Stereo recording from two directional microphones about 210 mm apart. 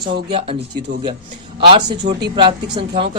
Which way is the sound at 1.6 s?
20° right (ahead or behind).